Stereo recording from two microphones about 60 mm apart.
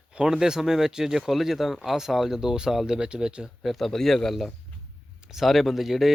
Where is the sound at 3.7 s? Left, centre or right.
Centre.